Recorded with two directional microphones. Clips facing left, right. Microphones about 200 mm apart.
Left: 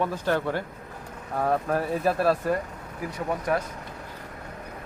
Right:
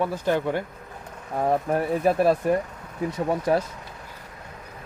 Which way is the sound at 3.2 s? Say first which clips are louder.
Right 4 dB; 30° right (ahead or behind).